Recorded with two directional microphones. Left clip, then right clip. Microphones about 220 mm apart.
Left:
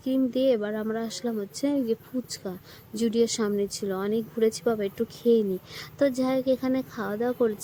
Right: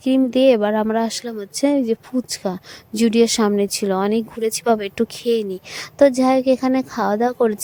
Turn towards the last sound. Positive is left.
turn(degrees=-35)  # may be behind; listen again after turning